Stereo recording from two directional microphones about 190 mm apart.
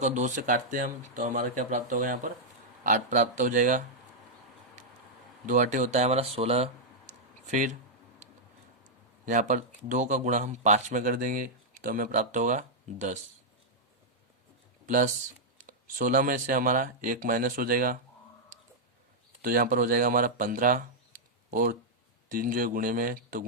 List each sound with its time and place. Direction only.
0.0 s speech: 40° right (ahead or behind)
5.5 s speech: 45° right (ahead or behind)
7.1 s a sound: 40° right (ahead or behind)
8.8 s speech: 40° right (ahead or behind)
14.8 s speech: 45° right (ahead or behind)
19.4 s speech: 50° right (ahead or behind)